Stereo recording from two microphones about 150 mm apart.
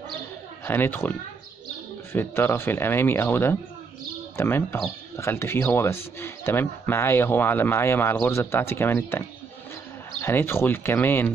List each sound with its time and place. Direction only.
0.7 s speech: 15° left (ahead or behind)
2.1 s speech: 15° left (ahead or behind)
10.2 s speech: 15° left (ahead or behind)